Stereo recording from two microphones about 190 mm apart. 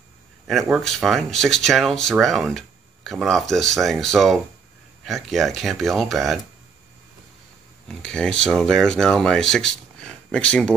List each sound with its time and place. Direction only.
0.5 s speech: centre (ahead or behind)
7.9 s speech: 5° left (ahead or behind)